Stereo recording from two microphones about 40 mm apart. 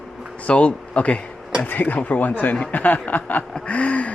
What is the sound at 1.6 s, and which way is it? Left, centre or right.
Speech, left.